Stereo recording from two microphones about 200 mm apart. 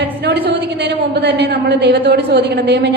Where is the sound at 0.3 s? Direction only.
55° right (ahead or behind).